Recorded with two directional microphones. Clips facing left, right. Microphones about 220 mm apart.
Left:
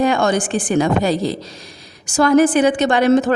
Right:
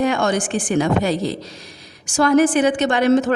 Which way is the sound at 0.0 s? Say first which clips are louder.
Left 2 dB; 35° left (ahead or behind).